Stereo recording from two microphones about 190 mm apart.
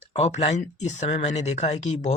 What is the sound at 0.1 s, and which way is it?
Speech, 35° left (ahead or behind).